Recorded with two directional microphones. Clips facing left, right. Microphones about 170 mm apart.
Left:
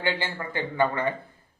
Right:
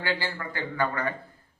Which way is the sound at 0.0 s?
20° left (ahead or behind).